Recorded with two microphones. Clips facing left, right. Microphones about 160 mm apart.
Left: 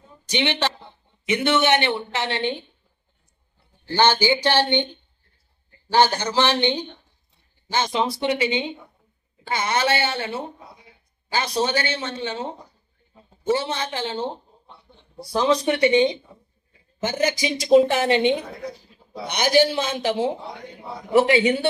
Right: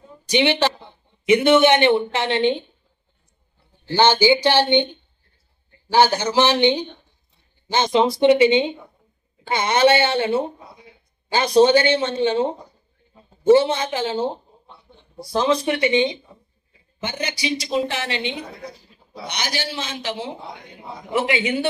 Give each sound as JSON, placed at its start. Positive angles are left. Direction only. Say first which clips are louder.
{"t": 0.3, "sound": "speech", "louder": "right 5 dB", "side_deg": -15}
{"t": 3.9, "sound": "speech", "louder": "right 3 dB", "side_deg": -15}
{"t": 5.9, "sound": "speech", "louder": "right 2 dB", "side_deg": -10}
{"t": 11.5, "sound": "speech", "louder": "right 12 dB", "side_deg": -25}
{"t": 13.8, "sound": "speech", "louder": "right 4 dB", "side_deg": -10}
{"t": 15.6, "sound": "a woman's voice", "louder": "left 1 dB", "side_deg": 30}